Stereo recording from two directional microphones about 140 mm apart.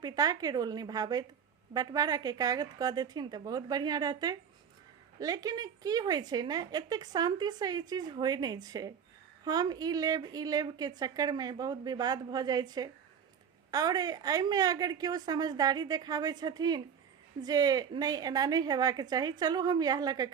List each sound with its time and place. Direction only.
0.0 s a woman's voice: 25° right (ahead or behind)